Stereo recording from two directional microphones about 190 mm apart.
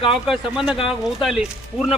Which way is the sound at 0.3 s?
5° right (ahead or behind).